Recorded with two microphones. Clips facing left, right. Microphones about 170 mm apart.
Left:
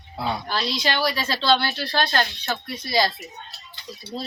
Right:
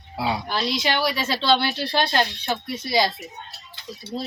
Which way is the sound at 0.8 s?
20° right (ahead or behind).